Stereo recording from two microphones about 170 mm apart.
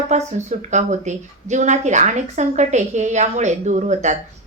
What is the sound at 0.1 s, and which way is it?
A woman's voice, 40° right (ahead or behind).